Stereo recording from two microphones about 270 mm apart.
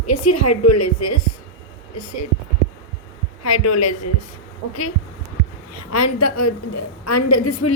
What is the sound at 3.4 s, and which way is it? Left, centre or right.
Speech, left.